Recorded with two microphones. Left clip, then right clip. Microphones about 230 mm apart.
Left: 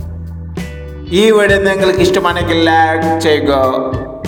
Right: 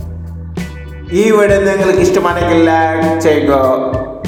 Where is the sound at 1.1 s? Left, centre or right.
Left.